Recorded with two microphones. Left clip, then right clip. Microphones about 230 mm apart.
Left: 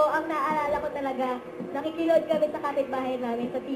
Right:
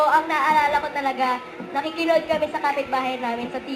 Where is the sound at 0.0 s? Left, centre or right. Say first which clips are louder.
Right 6 dB; centre.